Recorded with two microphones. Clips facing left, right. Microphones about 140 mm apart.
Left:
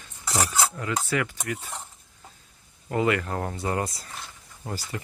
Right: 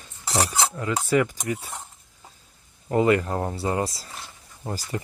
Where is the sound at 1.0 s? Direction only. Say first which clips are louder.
Right 6 dB; 10° right (ahead or behind).